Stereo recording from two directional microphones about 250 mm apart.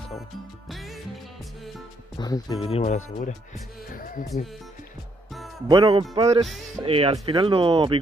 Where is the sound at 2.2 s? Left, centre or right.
Centre.